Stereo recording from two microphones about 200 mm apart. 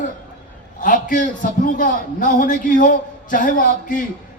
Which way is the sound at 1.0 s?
40° left (ahead or behind).